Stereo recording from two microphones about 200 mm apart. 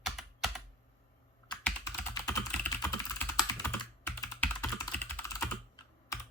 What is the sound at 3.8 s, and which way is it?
Computer keyboard, 15° left (ahead or behind).